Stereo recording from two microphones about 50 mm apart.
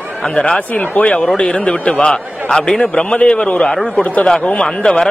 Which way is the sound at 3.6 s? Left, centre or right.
Centre.